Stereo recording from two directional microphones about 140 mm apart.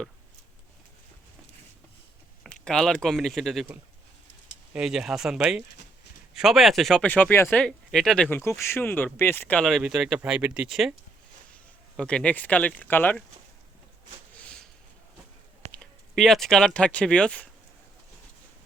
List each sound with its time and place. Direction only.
2.4 s speech: 5° left (ahead or behind)
4.7 s speech: 5° right (ahead or behind); by 7.6 s 15° left (ahead or behind)
7.6 s speech: 5° left (ahead or behind)
8.3 s speech: 20° left (ahead or behind)
9.6 s speech: centre (ahead or behind)
11.9 s speech: 5° left (ahead or behind)
14.4 s a sound: 5° left (ahead or behind)
15.7 s speech: 5° left (ahead or behind)